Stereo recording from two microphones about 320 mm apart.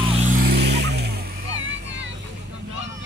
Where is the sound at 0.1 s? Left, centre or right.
Right.